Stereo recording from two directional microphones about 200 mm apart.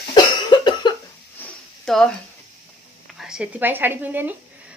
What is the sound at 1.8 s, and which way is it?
Speech, 5° left (ahead or behind).